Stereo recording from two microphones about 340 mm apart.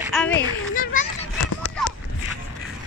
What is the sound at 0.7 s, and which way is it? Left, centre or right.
Speech, left.